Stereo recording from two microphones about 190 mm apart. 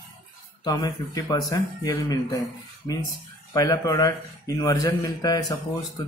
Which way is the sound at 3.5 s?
20° left (ahead or behind).